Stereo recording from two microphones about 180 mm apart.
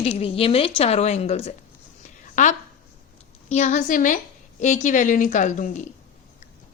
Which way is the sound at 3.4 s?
40° left (ahead or behind).